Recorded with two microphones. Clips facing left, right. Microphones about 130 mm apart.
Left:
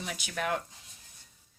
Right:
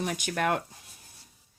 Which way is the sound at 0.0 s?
50° right (ahead or behind).